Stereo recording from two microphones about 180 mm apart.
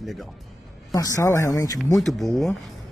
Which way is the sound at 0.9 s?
20° left (ahead or behind).